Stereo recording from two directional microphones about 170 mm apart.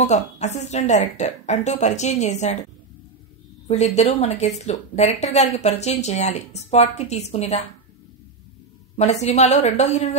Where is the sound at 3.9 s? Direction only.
40° left (ahead or behind).